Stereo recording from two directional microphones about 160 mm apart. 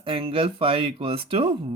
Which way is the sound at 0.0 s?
35° right (ahead or behind).